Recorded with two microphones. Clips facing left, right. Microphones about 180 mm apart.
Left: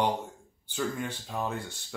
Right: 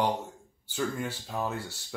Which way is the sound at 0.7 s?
Centre (ahead or behind).